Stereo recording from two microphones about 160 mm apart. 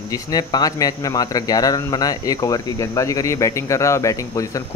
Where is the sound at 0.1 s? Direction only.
25° left (ahead or behind).